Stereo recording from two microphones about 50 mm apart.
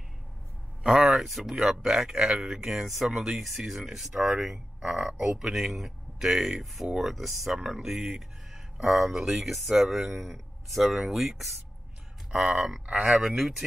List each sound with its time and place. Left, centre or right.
0.8 s speech: centre
1.1 s speech: centre
7.5 s speech: centre